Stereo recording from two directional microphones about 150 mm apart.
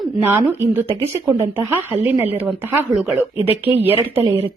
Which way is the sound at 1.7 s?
15° right (ahead or behind).